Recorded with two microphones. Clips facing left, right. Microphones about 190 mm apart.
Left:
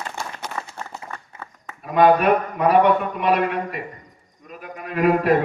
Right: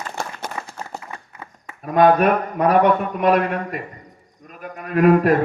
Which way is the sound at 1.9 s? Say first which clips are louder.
Right 1 dB; 45° right (ahead or behind).